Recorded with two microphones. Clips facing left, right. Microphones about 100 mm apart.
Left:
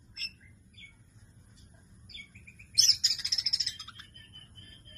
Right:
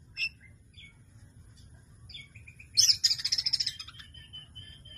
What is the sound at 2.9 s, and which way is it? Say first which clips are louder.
Bird: right 1 dB; 35° left (ahead or behind).